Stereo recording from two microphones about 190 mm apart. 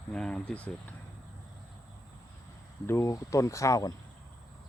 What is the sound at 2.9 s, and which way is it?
Speech, 15° left (ahead or behind).